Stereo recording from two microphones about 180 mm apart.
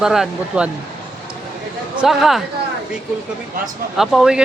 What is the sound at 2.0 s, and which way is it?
Speech, centre (ahead or behind).